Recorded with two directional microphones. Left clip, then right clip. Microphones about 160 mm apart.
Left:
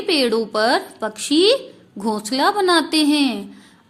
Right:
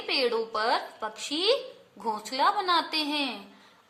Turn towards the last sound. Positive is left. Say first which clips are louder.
# left 11 dB
turn(degrees=30)  # may be behind; listen again after turning